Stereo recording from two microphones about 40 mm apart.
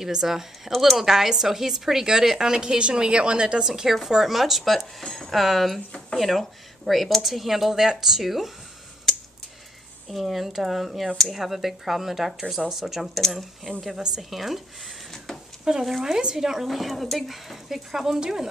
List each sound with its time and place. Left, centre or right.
0.0 s a woman's voice: centre
0.7 s speech: centre
1.0 s a woman's voice: centre
3.6 s a woman's voice: centre
10.0 s speech: centre
13.3 s speech: centre
13.8 s a woman's voice: centre
15.7 s a woman's voice: centre